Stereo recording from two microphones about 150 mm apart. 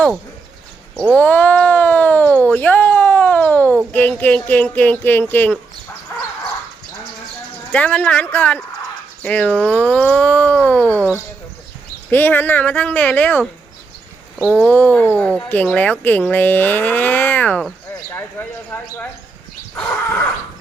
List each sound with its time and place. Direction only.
0.9 s speech: 10° left (ahead or behind)
7.7 s speech: 10° left (ahead or behind)
12.1 s speech: 15° left (ahead or behind)
14.6 s speech: 10° left (ahead or behind)